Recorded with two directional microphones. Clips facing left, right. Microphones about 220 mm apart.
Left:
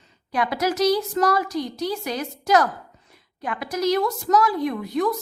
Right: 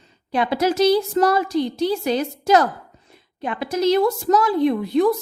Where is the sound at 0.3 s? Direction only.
25° right (ahead or behind).